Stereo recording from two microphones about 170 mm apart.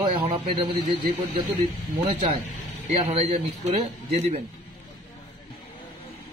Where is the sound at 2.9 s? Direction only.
45° right (ahead or behind).